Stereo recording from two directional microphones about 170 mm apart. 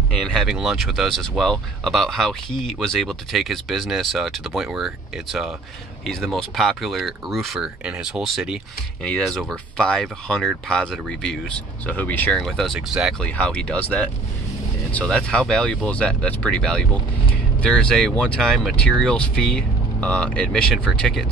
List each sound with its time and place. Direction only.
0.3 s speech: centre (ahead or behind)